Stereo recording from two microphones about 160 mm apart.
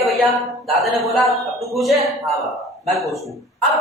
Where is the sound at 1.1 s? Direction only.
Centre (ahead or behind).